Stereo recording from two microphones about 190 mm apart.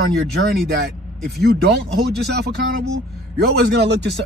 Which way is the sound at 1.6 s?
60° right (ahead or behind).